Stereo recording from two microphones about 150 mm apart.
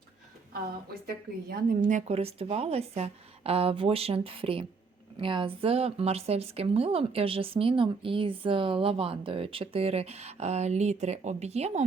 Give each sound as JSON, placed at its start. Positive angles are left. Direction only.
{"t": 1.0, "sound": "speech", "side_deg": -75}